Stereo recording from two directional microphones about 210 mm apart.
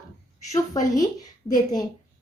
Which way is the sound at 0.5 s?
15° left (ahead or behind).